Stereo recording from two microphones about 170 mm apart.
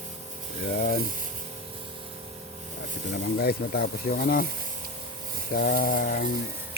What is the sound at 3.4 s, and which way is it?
Speech, 65° left (ahead or behind).